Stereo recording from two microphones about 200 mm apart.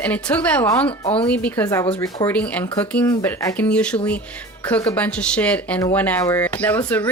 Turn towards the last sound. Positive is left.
turn(degrees=10)  # may be behind; listen again after turning